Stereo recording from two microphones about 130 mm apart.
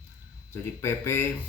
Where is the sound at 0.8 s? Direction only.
20° left (ahead or behind).